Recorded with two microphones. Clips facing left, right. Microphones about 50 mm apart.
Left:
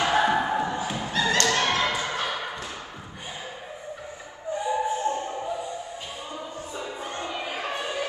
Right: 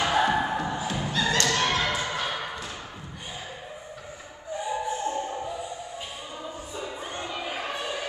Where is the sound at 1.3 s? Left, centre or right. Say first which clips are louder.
Left 2 dB; left.